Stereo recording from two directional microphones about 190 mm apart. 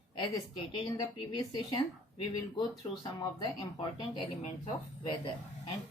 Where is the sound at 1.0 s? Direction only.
20° left (ahead or behind).